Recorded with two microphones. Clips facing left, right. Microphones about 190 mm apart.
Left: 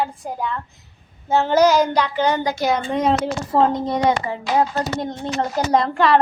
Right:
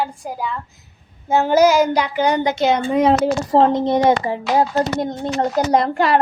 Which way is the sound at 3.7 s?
25° right (ahead or behind).